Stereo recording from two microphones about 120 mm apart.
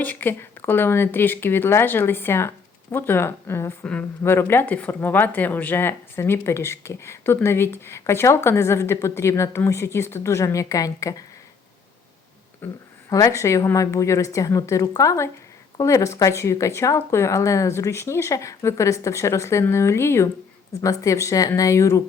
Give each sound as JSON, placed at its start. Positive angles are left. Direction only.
{"t": 0.0, "sound": "speech", "side_deg": 15}
{"t": 12.6, "sound": "speech", "side_deg": 15}
{"t": 13.1, "sound": "speech", "side_deg": 30}